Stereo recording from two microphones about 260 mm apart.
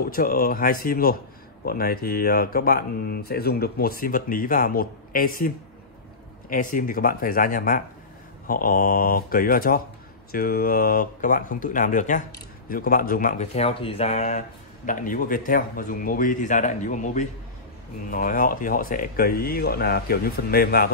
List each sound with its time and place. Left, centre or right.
0.0 s speech: left
6.5 s speech: left